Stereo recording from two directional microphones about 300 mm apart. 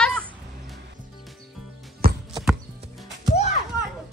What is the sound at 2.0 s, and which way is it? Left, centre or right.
Horse, right.